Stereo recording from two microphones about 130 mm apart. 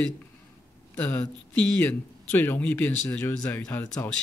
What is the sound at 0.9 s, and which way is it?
Speech, 10° left (ahead or behind).